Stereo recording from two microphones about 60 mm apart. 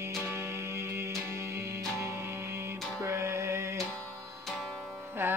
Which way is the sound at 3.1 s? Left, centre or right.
Right.